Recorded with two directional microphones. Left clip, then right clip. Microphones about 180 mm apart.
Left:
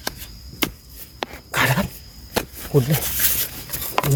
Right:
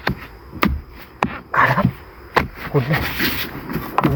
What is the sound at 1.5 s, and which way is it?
Dog, 90° left.